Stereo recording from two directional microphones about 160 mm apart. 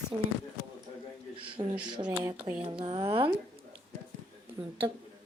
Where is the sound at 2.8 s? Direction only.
35° right (ahead or behind).